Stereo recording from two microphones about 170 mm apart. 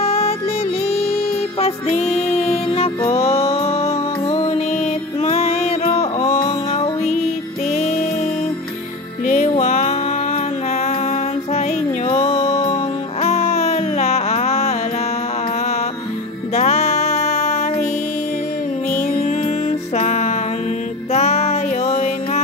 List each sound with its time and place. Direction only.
0.0 s music: 35° left (ahead or behind)
2.3 s music: 35° left (ahead or behind)
9.2 s music: 45° left (ahead or behind)
12.1 s music: 35° left (ahead or behind)
13.2 s a sound: 40° left (ahead or behind)
16.5 s music: 40° left (ahead or behind)
18.9 s music: 40° left (ahead or behind)